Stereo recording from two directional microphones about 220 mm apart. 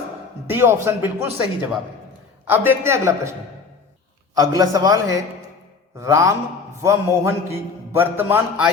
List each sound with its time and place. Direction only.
0.5 s a man's voice: 10° right (ahead or behind)
4.4 s a man's voice: 15° right (ahead or behind)